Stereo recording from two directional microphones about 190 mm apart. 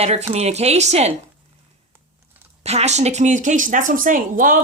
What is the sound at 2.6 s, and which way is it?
Speech, 35° right (ahead or behind).